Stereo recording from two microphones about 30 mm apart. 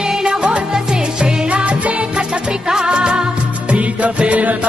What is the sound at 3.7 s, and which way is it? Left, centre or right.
Music, right.